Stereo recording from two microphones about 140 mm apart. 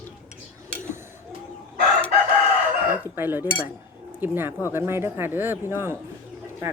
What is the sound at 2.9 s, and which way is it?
Chicken, 15° right (ahead or behind).